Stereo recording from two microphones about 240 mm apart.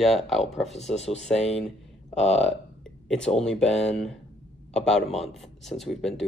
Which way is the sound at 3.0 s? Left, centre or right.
Centre.